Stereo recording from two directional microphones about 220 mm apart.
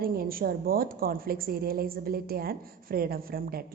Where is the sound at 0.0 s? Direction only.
40° right (ahead or behind).